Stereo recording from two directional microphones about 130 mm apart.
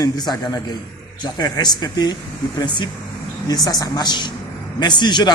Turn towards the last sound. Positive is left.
turn(degrees=35)  # may be behind; listen again after turning